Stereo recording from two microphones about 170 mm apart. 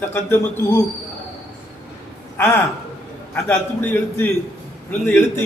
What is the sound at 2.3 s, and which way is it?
A man's voice, 10° left (ahead or behind).